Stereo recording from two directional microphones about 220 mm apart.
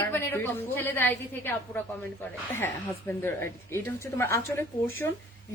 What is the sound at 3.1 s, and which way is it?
Speech, 10° left (ahead or behind).